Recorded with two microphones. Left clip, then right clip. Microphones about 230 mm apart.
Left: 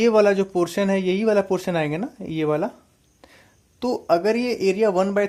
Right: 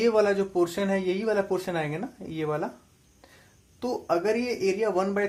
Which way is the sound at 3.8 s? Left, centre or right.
Left.